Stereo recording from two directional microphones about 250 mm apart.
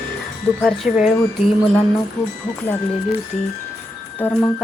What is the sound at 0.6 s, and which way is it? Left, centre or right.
Speech, centre.